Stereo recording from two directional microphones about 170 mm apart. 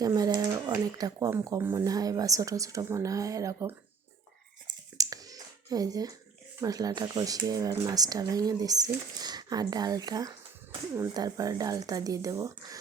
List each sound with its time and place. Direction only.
0.0 s speech: 20° right (ahead or behind)
4.9 s finger snapping: 20° right (ahead or behind)
6.6 s speech: 20° right (ahead or behind)